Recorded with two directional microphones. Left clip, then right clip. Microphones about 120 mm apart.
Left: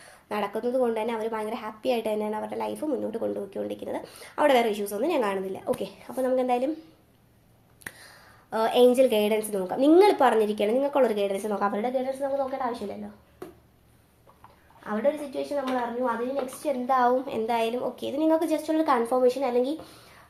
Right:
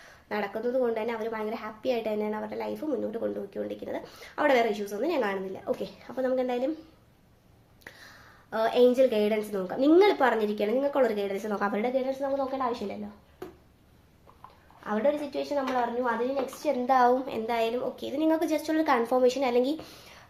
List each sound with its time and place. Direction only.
0.0 s a woman's voice: 25° left (ahead or behind)
7.9 s a woman's voice: 25° left (ahead or behind)
11.5 s a woman's voice: 10° right (ahead or behind)
11.8 s speech: 20° right (ahead or behind)
14.8 s a woman's voice: 20° right (ahead or behind)
17.2 s a woman's voice: 10° left (ahead or behind)
18.3 s a woman's voice: 5° right (ahead or behind); by 19.8 s 30° right (ahead or behind)